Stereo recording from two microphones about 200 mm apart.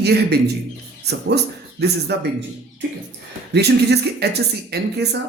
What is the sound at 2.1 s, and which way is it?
Speech, 55° right (ahead or behind).